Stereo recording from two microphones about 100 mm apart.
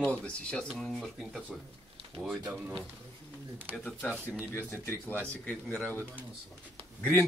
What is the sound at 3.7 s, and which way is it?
A man's voice, 10° left (ahead or behind).